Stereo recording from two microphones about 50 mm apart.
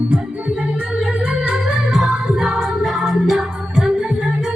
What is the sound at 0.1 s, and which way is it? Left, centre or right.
Music, right.